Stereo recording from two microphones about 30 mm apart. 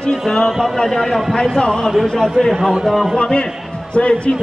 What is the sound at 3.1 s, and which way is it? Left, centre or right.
A man's voice, left.